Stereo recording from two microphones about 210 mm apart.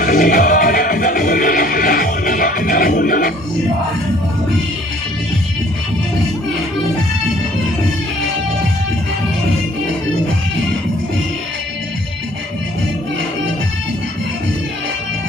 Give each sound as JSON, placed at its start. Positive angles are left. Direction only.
{"t": 0.0, "sound": "music", "side_deg": 40}